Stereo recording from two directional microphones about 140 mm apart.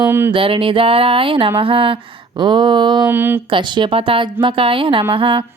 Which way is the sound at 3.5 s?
35° right (ahead or behind).